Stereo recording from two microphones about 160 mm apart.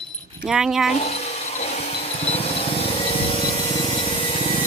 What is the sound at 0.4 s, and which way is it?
Speech, 5° right (ahead or behind).